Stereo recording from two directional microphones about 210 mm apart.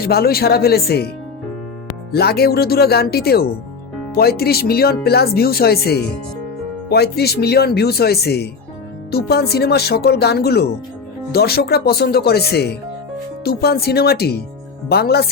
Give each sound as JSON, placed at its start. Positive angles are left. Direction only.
{"t": 0.0, "sound": "speech", "side_deg": 45}
{"t": 2.1, "sound": "speech", "side_deg": 50}